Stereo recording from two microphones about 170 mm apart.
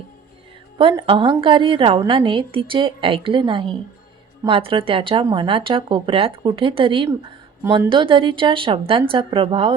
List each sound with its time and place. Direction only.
0.8 s speech: 30° right (ahead or behind)